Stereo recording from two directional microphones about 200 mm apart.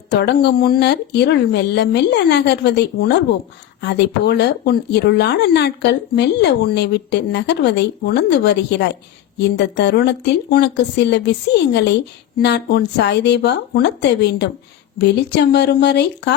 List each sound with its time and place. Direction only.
0.1 s speech: 55° left (ahead or behind)